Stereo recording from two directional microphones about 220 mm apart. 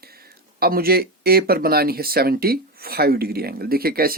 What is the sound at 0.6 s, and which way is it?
Speech, 45° right (ahead or behind).